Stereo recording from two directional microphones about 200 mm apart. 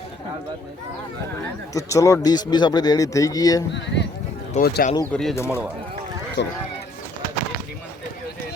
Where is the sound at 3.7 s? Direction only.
60° left (ahead or behind).